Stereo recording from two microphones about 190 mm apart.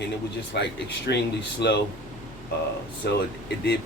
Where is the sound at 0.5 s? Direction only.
65° left (ahead or behind).